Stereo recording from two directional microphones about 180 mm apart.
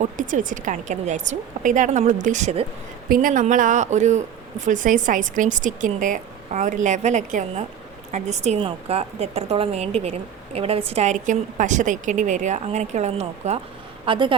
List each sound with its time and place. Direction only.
0.0 s a woman's voice: 45° right (ahead or behind)
3.1 s a woman's voice: 50° right (ahead or behind); by 14.3 s 30° right (ahead or behind)